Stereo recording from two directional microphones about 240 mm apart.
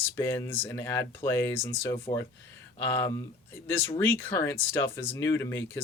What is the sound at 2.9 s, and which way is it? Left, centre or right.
Speech, centre.